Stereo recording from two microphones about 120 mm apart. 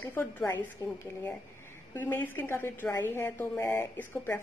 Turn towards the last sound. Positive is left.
turn(degrees=15)  # may be behind; listen again after turning